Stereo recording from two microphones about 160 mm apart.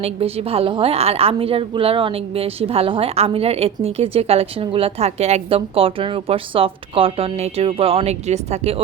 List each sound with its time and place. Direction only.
0.0 s a woman's voice: 40° right (ahead or behind)